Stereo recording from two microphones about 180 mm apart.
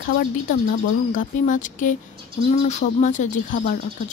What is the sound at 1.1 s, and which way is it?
Speech, 45° left (ahead or behind).